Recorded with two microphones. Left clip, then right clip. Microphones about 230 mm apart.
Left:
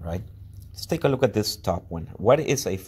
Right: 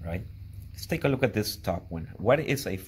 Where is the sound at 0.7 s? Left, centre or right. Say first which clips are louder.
Left 4 dB; left.